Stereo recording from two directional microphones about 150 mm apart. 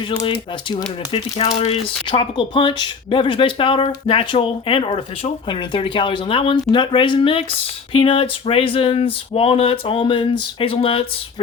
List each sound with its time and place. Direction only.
0.3 s speech: 30° left (ahead or behind)